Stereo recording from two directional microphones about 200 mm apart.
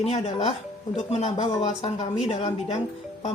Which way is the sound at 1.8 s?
30° left (ahead or behind).